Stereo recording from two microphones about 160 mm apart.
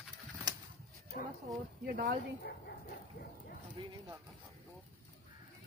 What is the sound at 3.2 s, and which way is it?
Speech, 60° left (ahead or behind).